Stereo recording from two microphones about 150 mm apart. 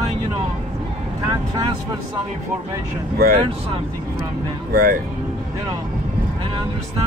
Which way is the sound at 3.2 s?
80° right.